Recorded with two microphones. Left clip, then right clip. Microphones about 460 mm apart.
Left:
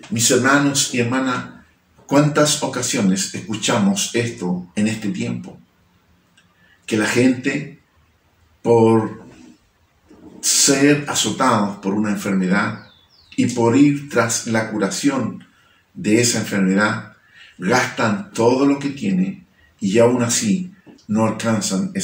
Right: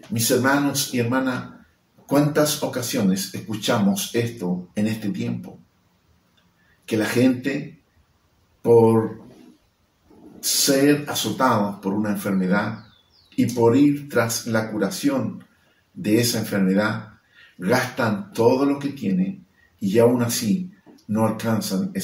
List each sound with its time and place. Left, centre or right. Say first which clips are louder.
0.1 s speech: left 4 dB; right
6.9 s speech: left 3 dB; right
10.4 s speech: left 3 dB; right
16.0 s speech: left 4 dB; right